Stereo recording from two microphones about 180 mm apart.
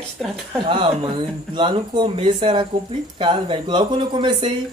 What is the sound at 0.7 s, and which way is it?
A woman's voice, 25° right (ahead or behind).